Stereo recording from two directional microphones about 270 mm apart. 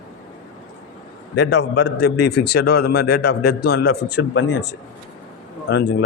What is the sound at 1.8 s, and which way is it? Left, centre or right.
A man's voice, left.